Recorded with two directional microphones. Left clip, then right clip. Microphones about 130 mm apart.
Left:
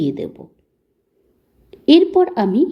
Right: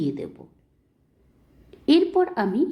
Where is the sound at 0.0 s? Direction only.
35° left (ahead or behind).